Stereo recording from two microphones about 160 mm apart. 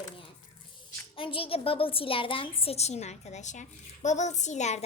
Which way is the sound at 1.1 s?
35° left (ahead or behind).